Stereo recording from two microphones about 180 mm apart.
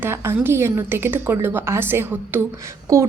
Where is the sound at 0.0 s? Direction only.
15° right (ahead or behind).